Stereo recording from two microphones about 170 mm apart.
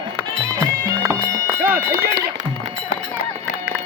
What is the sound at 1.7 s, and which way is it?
Run, 70° right (ahead or behind).